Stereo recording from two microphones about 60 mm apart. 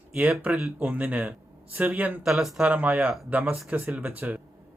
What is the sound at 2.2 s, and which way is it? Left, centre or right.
Speech, centre.